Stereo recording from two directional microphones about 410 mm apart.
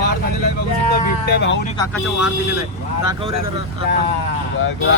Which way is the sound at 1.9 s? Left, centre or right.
Centre.